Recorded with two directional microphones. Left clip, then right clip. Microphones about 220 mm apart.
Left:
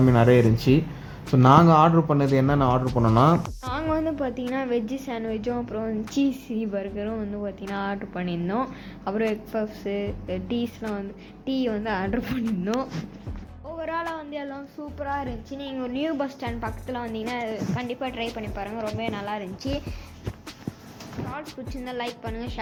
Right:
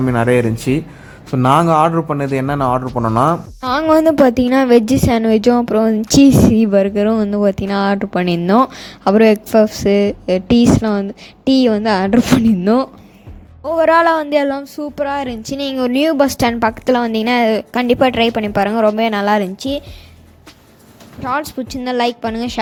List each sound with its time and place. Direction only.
0.0 s a man's voice: 15° right (ahead or behind)
3.6 s a woman's voice: 50° right (ahead or behind)
13.7 s a woman's voice: 55° right (ahead or behind)
15.5 s a woman's voice: 55° right (ahead or behind)
21.8 s a woman's voice: 55° right (ahead or behind)